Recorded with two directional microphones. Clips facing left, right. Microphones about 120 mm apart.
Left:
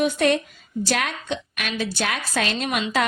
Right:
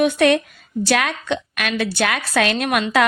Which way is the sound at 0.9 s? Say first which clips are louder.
Right 6 dB; 80° right.